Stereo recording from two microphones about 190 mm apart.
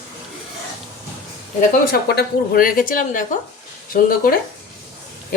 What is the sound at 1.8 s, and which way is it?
A woman's voice, 55° left (ahead or behind).